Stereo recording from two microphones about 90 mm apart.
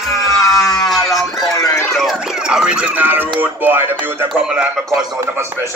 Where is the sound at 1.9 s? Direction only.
5° right (ahead or behind).